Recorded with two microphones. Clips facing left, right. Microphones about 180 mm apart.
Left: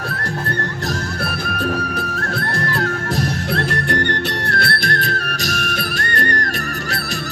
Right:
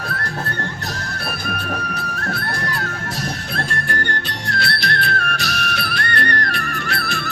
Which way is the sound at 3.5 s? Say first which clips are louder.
Left 6 dB; 75° left (ahead or behind).